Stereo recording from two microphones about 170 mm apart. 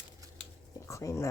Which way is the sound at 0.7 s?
20° left (ahead or behind).